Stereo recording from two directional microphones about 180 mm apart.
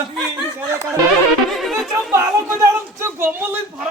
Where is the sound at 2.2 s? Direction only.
15° right (ahead or behind).